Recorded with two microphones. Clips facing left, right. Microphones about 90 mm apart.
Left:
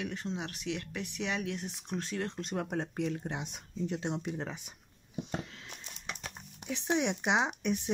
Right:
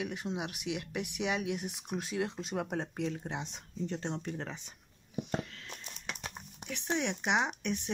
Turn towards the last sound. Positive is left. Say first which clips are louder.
# left 1 dB
turn(degrees=15)  # may be behind; listen again after turning